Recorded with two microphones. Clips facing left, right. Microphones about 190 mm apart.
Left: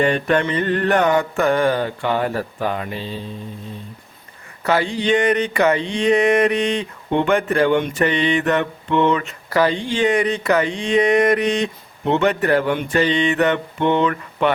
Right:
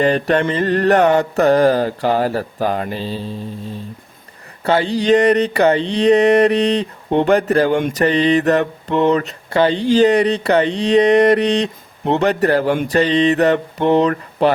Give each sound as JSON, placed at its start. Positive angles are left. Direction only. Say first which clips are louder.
{"t": 0.0, "sound": "mantra", "louder": "right 2 dB", "side_deg": -35}